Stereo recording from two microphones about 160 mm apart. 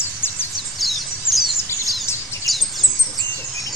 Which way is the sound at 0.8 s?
Centre (ahead or behind).